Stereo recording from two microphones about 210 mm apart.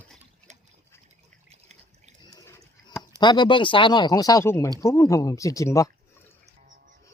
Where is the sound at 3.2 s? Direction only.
20° left (ahead or behind).